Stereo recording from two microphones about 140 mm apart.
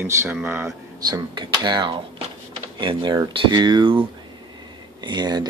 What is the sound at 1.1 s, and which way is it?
Speech, 30° right (ahead or behind).